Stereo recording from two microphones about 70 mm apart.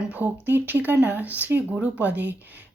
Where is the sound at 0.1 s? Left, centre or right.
Right.